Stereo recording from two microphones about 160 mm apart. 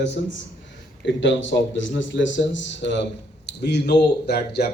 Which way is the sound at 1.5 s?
90° left.